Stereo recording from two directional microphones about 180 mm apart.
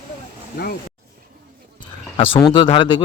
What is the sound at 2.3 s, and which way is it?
Speech, 25° left (ahead or behind).